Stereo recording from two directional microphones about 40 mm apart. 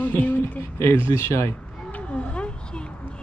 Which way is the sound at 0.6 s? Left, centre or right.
Left.